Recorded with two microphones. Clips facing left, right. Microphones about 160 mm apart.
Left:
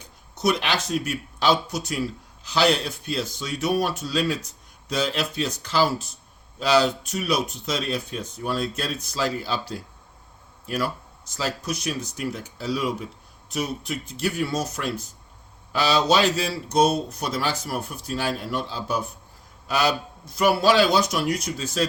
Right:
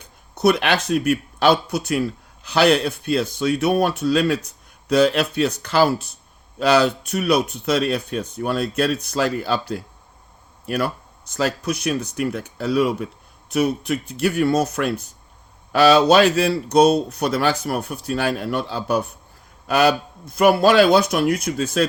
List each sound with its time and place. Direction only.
0.3 s speech: 60° right (ahead or behind)